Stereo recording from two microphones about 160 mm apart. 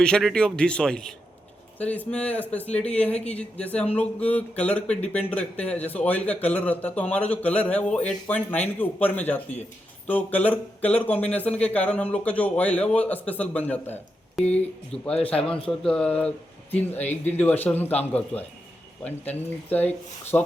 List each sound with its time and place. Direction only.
0.0 s a man's voice: 5° left (ahead or behind)
14.4 s speech: 40° left (ahead or behind)
14.9 s a man's voice: 5° left (ahead or behind)